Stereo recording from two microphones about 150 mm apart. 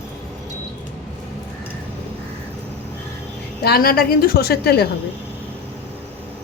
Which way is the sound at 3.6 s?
90° left.